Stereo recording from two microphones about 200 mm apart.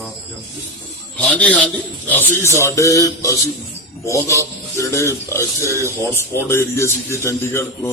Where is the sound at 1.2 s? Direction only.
5° left (ahead or behind).